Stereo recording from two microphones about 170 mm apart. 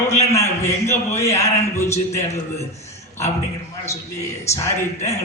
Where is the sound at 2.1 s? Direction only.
15° left (ahead or behind).